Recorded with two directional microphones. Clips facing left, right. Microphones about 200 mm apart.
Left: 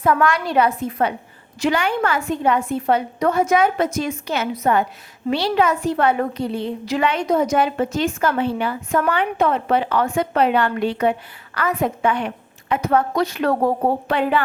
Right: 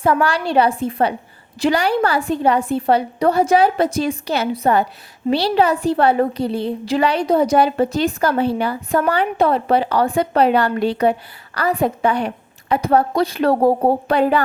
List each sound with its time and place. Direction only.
0.0 s a woman's voice: 30° right (ahead or behind)